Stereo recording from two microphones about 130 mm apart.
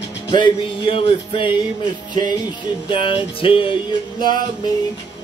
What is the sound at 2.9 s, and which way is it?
Music, 40° left (ahead or behind).